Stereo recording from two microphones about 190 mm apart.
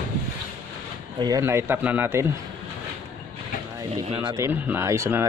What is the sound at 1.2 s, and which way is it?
Speech, 15° right (ahead or behind).